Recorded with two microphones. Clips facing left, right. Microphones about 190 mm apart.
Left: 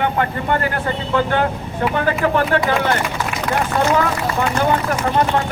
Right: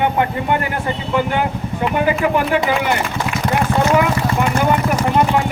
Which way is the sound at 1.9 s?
10° right (ahead or behind).